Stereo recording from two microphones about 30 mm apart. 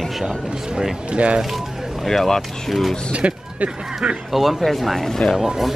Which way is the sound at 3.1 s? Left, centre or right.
Right.